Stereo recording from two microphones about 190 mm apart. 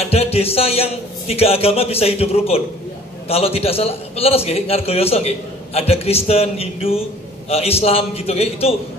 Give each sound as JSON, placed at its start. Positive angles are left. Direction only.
{"t": 0.0, "sound": "a man's voice", "side_deg": 30}